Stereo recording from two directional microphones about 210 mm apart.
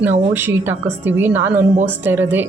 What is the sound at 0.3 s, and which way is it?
Speech, 10° right (ahead or behind).